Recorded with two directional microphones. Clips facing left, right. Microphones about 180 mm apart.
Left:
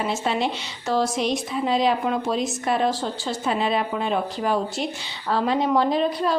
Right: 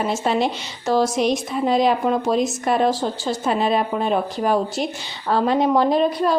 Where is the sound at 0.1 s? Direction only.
40° right (ahead or behind).